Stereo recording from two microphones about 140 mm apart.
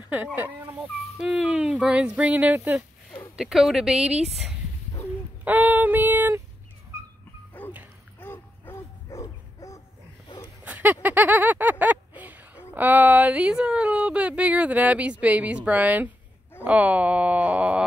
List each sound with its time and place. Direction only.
0.1 s a woman's voice: 15° right (ahead or behind)
5.4 s female singing: 10° right (ahead or behind)
6.9 s dog: 15° right (ahead or behind)
7.6 s bow-wow: 10° left (ahead or behind)
8.2 s dog: 15° left (ahead or behind)
10.6 s a sound: 10° right (ahead or behind)
11.8 s a woman's voice: 10° right (ahead or behind)